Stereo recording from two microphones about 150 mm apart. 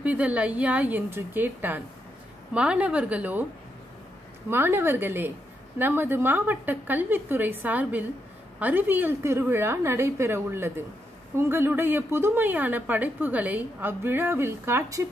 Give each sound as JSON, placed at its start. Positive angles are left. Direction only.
{"t": 0.0, "sound": "a woman's voice", "side_deg": -10}
{"t": 4.5, "sound": "a woman's voice", "side_deg": -15}